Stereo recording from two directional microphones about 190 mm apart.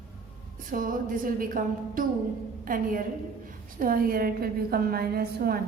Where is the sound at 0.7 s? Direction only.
45° right (ahead or behind).